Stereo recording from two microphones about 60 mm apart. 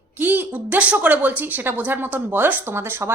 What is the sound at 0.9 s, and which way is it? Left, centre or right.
A woman's voice, right.